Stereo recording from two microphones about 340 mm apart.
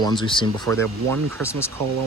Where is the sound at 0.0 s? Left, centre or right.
Centre.